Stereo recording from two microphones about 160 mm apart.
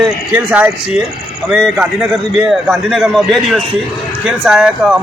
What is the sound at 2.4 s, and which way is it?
A man's voice, 5° right (ahead or behind).